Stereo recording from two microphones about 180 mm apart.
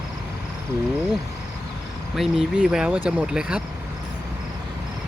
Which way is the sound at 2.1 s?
Centre (ahead or behind).